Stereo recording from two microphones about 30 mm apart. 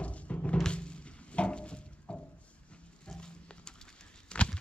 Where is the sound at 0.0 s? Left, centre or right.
Left.